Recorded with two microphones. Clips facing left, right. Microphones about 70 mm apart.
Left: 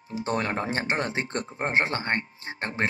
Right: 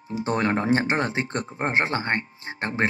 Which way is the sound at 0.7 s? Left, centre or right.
Right.